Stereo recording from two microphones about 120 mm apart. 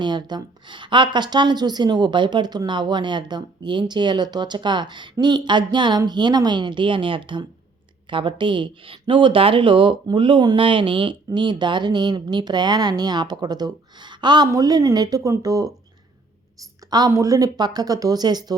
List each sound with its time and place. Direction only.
0.0 s a woman's voice: 40° right (ahead or behind)
17.1 s a woman's voice: 25° right (ahead or behind)